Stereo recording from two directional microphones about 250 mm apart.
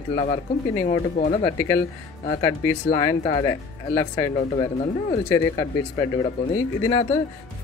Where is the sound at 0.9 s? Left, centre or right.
Left.